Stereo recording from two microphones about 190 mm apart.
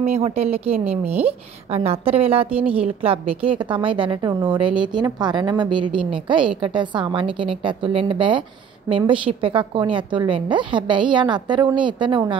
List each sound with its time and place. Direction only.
0.0 s a woman's voice: 35° right (ahead or behind)